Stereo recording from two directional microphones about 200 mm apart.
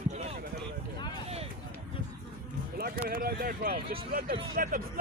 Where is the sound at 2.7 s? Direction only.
50° right (ahead or behind).